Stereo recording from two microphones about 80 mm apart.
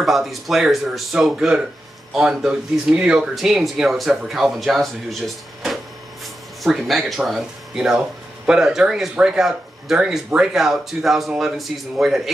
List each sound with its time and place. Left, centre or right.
0.0 s speech: centre